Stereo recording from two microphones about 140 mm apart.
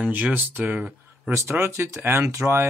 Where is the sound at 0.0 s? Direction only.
10° right (ahead or behind).